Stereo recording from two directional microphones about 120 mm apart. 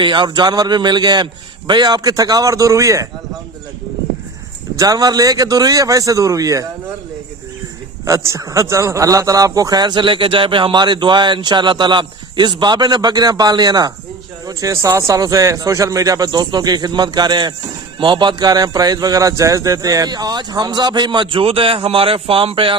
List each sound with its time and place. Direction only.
0.0 s a man's voice: 40° right (ahead or behind)
4.8 s a man's voice: 30° right (ahead or behind)
8.0 s a man's voice: 25° right (ahead or behind); by 22.8 s 50° right (ahead or behind)